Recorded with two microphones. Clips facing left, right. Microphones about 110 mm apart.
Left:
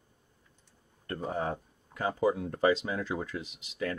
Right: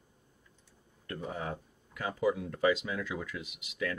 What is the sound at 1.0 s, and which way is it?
Speech, 40° left (ahead or behind).